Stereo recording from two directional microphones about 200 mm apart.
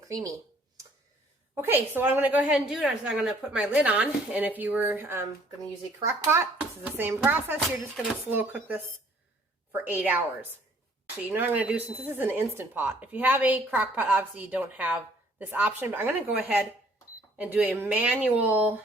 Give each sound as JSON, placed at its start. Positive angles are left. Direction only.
{"t": 0.0, "sound": "speech", "side_deg": -15}
{"t": 1.5, "sound": "speech", "side_deg": -10}
{"t": 11.3, "sound": "speech", "side_deg": -10}